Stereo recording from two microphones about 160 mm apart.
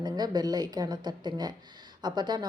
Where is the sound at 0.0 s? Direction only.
25° right (ahead or behind).